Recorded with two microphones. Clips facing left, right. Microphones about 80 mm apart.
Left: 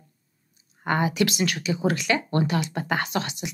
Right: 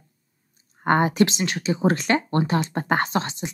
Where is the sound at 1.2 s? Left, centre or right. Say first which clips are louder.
Right 3 dB; right.